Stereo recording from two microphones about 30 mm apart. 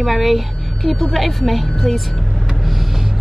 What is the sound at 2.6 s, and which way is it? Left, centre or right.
Vehicle, centre.